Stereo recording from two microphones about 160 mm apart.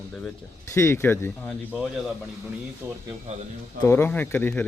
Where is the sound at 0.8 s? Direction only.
15° left (ahead or behind).